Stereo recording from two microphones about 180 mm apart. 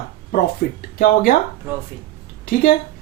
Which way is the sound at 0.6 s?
60° left (ahead or behind).